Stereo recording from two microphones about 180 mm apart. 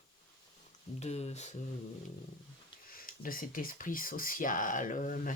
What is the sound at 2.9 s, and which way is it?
Speech, 50° left (ahead or behind).